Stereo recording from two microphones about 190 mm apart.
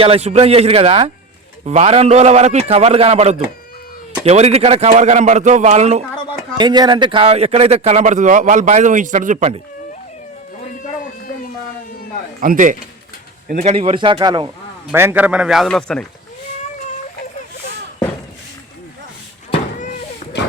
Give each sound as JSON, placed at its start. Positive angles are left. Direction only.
{"t": 0.0, "sound": "a man's voice", "side_deg": -30}
{"t": 6.6, "sound": "a man's voice", "side_deg": -20}
{"t": 12.4, "sound": "speech", "side_deg": -45}
{"t": 14.9, "sound": "a man's voice", "side_deg": -10}
{"t": 19.5, "sound": "vehicle", "side_deg": 40}